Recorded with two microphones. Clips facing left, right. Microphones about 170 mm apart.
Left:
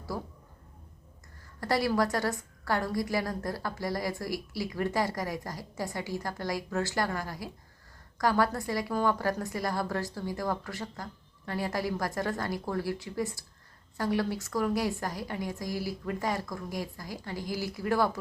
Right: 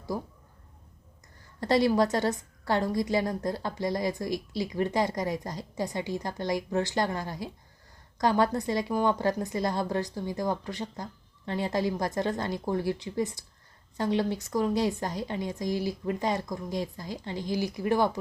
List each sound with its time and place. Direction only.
1.6 s a woman's voice: 20° right (ahead or behind)